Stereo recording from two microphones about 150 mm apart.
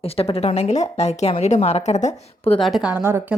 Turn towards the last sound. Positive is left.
turn(degrees=-15)  # may be behind; listen again after turning